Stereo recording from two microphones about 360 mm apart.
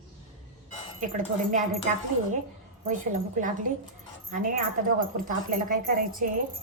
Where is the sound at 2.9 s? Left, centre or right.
Right.